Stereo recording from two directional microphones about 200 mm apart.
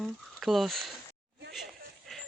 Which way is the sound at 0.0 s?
Centre (ahead or behind).